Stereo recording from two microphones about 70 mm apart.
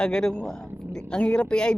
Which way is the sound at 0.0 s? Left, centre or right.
Centre.